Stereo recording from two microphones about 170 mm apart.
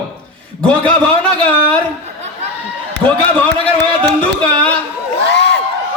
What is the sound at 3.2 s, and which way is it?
Speech, 5° left (ahead or behind).